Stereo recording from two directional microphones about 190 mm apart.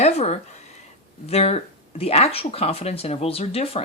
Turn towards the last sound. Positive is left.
turn(degrees=30)  # may be behind; listen again after turning